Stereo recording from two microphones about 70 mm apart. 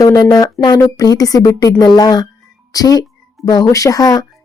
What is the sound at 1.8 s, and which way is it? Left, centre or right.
Speech, left.